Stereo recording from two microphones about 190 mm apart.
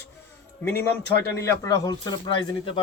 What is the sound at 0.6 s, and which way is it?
Speech, 10° left (ahead or behind).